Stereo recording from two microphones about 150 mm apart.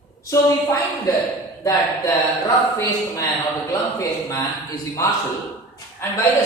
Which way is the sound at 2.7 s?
20° left (ahead or behind).